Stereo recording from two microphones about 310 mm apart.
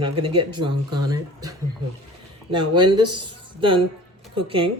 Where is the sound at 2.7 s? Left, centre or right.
Right.